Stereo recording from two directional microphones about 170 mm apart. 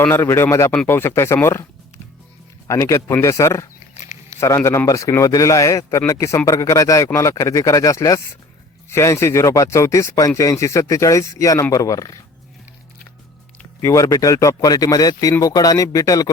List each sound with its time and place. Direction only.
0.0 s a man's voice: 15° left (ahead or behind)
2.6 s a man's voice: 15° left (ahead or behind)
13.8 s speech: 20° left (ahead or behind)